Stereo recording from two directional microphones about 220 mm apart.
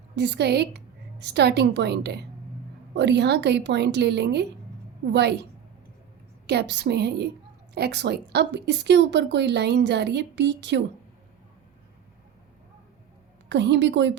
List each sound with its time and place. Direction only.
0.2 s a woman's voice: 50° right (ahead or behind)
6.5 s a woman's voice: 50° right (ahead or behind)
13.5 s a woman's voice: 50° right (ahead or behind)